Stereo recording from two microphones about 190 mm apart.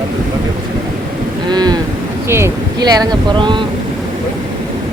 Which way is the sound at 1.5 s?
20° right (ahead or behind).